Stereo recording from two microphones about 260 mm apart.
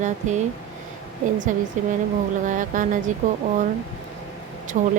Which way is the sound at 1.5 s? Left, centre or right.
Right.